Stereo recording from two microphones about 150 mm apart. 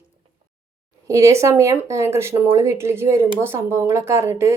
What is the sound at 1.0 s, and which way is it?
Speech, 20° right (ahead or behind).